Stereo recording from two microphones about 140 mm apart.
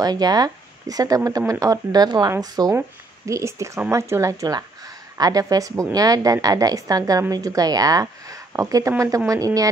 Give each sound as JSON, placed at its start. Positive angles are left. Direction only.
{"t": 0.0, "sound": "a woman's voice", "side_deg": -30}